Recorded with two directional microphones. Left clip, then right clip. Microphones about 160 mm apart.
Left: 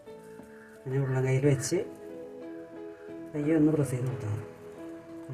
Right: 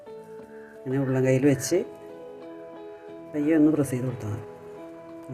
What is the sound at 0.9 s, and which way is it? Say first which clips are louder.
Speech: right 7 dB; 60° right (ahead or behind).